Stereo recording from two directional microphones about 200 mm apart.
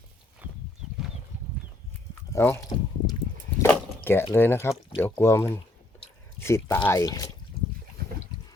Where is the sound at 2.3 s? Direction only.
15° left (ahead or behind).